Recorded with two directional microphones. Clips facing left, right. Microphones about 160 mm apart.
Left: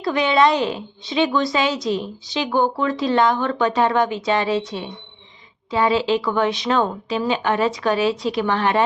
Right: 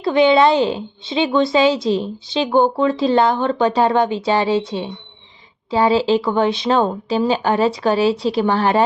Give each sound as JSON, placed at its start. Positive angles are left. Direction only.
{"t": 0.0, "sound": "a woman's voice", "side_deg": -25}